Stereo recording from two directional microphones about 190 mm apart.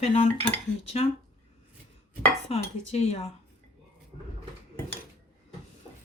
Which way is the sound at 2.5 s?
35° left (ahead or behind).